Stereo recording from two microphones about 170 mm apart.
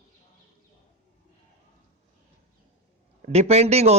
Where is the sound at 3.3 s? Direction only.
40° right (ahead or behind).